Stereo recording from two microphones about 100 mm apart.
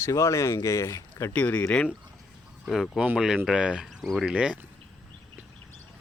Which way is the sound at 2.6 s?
5° right (ahead or behind).